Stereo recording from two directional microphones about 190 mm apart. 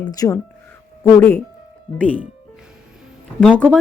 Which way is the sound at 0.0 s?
20° left (ahead or behind).